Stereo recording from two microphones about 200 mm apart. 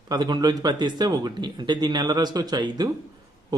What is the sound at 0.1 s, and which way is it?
A man's voice, 20° right (ahead or behind).